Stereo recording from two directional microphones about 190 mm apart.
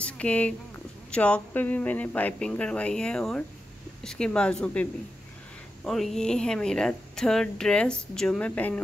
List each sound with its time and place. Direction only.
0.0 s a woman's voice: 5° left (ahead or behind)
5.9 s a woman's voice: centre (ahead or behind)